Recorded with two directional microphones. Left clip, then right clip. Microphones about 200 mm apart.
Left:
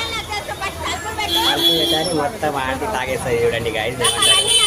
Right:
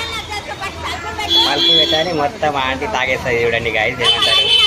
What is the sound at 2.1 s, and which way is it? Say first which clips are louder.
Speech: right 3 dB; 5° left (ahead or behind).